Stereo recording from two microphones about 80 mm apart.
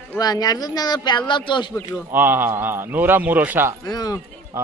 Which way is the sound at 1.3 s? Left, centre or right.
Left.